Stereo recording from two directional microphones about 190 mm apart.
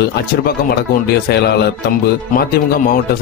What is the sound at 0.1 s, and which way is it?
Speech, 55° left (ahead or behind).